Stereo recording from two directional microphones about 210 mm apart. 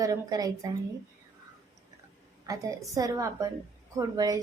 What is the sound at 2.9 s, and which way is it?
A woman's voice, 15° right (ahead or behind).